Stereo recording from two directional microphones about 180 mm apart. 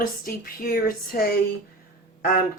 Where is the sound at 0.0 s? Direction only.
55° left (ahead or behind).